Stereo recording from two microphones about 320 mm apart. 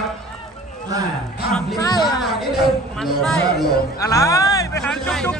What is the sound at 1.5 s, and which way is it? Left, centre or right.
Music, centre.